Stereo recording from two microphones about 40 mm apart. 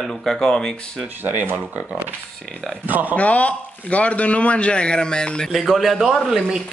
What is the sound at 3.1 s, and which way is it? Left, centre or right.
A man's voice, left.